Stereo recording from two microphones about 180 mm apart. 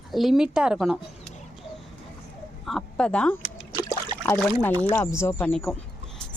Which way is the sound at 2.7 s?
5° left (ahead or behind).